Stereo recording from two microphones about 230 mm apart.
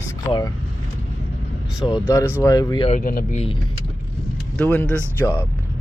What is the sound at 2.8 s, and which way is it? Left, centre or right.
Speech, left.